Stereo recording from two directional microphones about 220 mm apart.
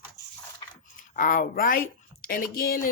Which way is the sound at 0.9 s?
40° left (ahead or behind).